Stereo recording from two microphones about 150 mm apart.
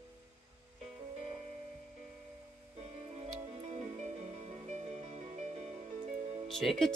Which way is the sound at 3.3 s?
45° right (ahead or behind).